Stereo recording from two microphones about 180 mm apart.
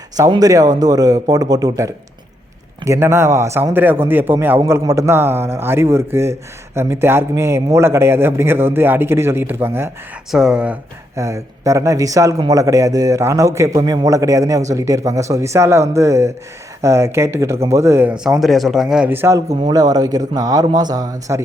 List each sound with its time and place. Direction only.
0.2 s a man's voice: 20° right (ahead or behind)